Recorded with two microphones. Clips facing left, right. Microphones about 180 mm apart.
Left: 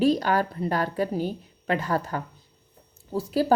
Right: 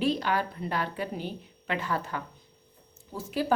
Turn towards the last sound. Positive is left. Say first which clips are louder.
# left 5 dB
turn(degrees=40)  # may be behind; listen again after turning